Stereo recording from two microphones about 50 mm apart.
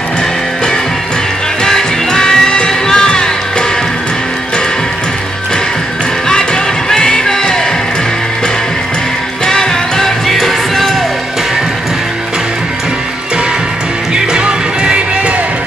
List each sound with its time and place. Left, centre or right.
1.6 s music: centre
6.2 s music: centre
9.5 s music: centre
14.1 s music: centre